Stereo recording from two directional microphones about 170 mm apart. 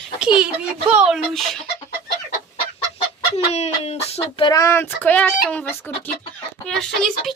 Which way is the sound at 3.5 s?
40° left (ahead or behind).